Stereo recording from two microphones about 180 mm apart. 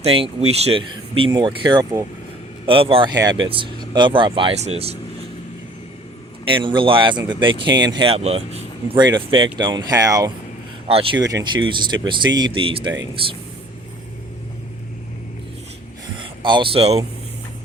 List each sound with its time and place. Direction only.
0.0 s speech: 30° right (ahead or behind)
2.6 s speech: 30° right (ahead or behind)
6.5 s speech: 25° right (ahead or behind)
16.2 s speech: 25° right (ahead or behind)